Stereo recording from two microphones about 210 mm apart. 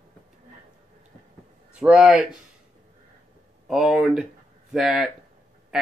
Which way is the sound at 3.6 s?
Centre (ahead or behind).